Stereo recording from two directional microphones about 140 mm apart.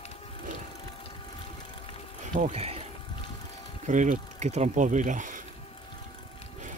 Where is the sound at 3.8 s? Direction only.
65° right (ahead or behind).